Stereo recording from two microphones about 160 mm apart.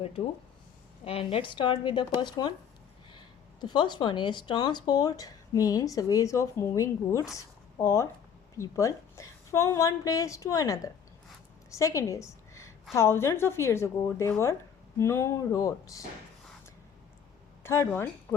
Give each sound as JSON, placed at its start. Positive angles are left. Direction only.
{"t": 1.0, "sound": "a woman's voice", "side_deg": 35}
{"t": 17.6, "sound": "speech", "side_deg": 15}